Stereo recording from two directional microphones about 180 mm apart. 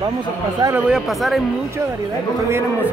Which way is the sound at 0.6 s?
15° right (ahead or behind).